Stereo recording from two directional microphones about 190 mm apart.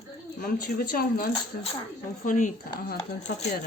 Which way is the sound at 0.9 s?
50° left (ahead or behind).